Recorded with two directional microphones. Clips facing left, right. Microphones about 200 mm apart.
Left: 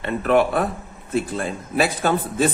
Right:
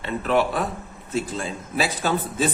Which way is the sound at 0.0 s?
55° left (ahead or behind).